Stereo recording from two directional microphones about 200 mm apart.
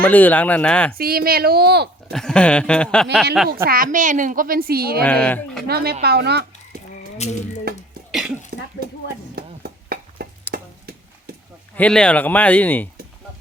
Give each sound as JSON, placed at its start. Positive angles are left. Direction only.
{"t": 0.0, "sound": "speech", "side_deg": 10}
{"t": 0.9, "sound": "a woman's voice", "side_deg": -50}
{"t": 2.1, "sound": "speech", "side_deg": 5}
{"t": 3.7, "sound": "a woman's voice", "side_deg": -40}
{"t": 5.0, "sound": "speech", "side_deg": 5}
{"t": 5.6, "sound": "a woman's voice", "side_deg": -50}
{"t": 7.2, "sound": "speech", "side_deg": 35}
{"t": 8.5, "sound": "speech", "side_deg": -45}
{"t": 9.3, "sound": "chop", "side_deg": -50}
{"t": 11.8, "sound": "speech", "side_deg": 5}